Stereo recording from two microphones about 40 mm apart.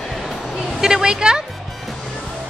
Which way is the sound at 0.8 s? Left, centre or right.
Centre.